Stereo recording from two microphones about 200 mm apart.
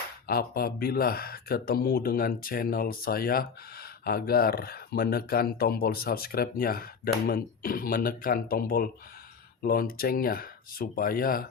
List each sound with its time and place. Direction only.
0.3 s speech: 50° left (ahead or behind)